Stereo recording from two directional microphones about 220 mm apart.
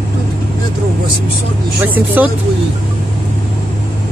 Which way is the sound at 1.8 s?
10° right (ahead or behind).